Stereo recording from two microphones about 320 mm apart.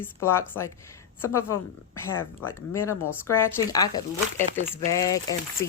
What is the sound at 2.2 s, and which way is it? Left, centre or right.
Speech, left.